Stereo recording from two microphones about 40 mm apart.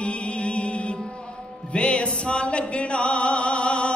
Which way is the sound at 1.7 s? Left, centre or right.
Left.